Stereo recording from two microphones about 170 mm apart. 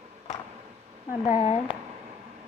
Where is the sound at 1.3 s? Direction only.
35° left (ahead or behind).